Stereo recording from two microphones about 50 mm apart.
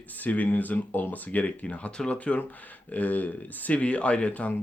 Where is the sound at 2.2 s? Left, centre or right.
Left.